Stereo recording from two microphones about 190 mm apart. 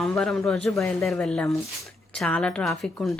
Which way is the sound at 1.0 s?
5° left (ahead or behind).